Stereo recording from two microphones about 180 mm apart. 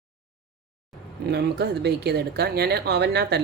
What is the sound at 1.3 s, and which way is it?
A man's voice, 65° right (ahead or behind).